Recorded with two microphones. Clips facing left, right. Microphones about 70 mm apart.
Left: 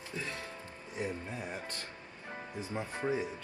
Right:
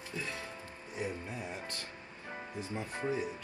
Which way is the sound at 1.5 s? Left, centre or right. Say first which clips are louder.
Left 1 dB; left.